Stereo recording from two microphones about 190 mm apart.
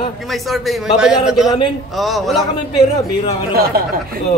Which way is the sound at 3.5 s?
55° right (ahead or behind).